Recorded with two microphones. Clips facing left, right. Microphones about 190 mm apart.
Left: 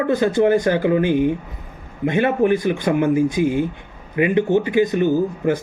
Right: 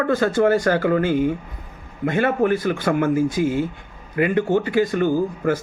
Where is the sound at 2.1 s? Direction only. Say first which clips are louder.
Left 2 dB; 20° left (ahead or behind).